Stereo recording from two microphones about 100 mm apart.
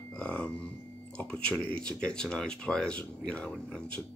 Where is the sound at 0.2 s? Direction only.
15° left (ahead or behind).